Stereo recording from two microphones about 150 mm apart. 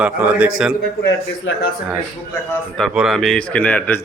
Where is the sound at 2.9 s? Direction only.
Centre (ahead or behind).